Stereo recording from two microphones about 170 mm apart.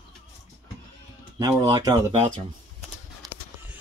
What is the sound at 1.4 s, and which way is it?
Speech, 20° right (ahead or behind).